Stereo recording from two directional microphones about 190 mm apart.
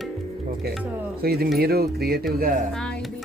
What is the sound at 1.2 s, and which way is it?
Speech, 55° right (ahead or behind).